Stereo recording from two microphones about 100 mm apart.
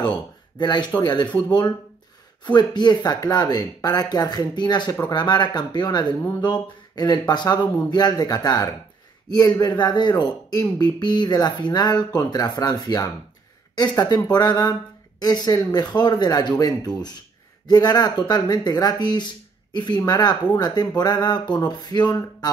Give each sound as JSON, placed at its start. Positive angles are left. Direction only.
{"t": 0.6, "sound": "speech", "side_deg": 45}